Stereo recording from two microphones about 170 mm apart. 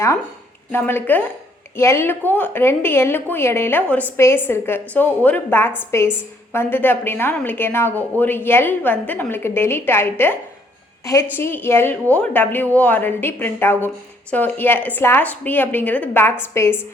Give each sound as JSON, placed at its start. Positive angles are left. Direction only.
{"t": 0.7, "sound": "a woman's voice", "side_deg": 10}